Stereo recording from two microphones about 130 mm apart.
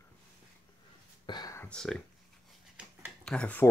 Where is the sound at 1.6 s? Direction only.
5° left (ahead or behind).